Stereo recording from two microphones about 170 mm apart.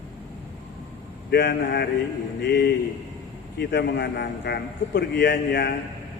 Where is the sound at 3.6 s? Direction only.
85° left.